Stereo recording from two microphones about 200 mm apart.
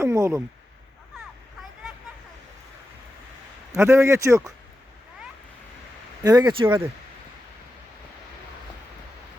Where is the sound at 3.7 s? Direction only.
15° right (ahead or behind).